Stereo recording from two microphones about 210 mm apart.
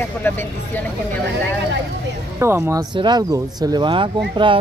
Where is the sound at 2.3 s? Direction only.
10° right (ahead or behind).